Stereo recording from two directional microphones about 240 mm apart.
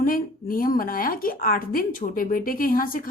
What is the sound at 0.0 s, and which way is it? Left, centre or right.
A woman's voice, left.